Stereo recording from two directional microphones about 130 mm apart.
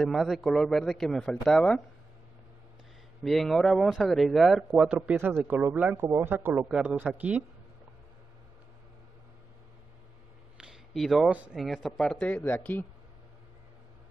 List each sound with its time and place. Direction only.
0.0 s speech: centre (ahead or behind)
3.3 s speech: centre (ahead or behind)
10.6 s a sound: centre (ahead or behind)
11.3 s speech: 5° right (ahead or behind); by 12.8 s 15° left (ahead or behind)